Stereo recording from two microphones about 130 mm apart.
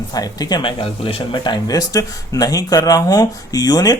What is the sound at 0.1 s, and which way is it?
Speech, 30° left (ahead or behind).